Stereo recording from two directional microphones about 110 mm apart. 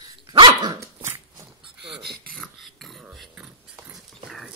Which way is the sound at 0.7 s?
25° right (ahead or behind).